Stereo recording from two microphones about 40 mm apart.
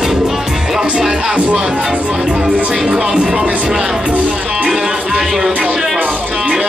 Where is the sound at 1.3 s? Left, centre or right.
Right.